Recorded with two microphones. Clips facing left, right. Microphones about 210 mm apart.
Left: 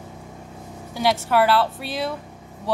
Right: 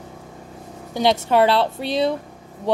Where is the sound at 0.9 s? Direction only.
25° right (ahead or behind).